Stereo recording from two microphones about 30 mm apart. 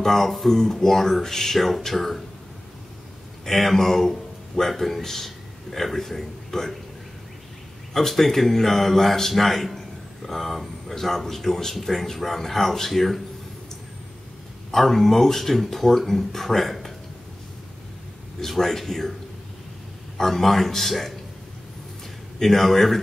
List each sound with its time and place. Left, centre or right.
0.0 s speech: centre
3.4 s a man's voice: centre
7.9 s speech: centre
14.7 s speech: centre
18.4 s speech: centre
20.2 s speech: centre
22.4 s speech: centre